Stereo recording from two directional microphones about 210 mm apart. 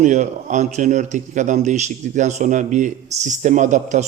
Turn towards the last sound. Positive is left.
turn(degrees=-35)  # may be behind; listen again after turning